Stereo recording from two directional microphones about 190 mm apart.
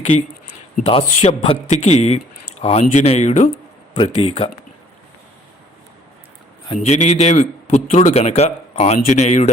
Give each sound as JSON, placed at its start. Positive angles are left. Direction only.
{"t": 0.9, "sound": "a man's voice", "side_deg": 30}
{"t": 3.9, "sound": "a man's voice", "side_deg": 30}
{"t": 6.7, "sound": "a man's voice", "side_deg": 35}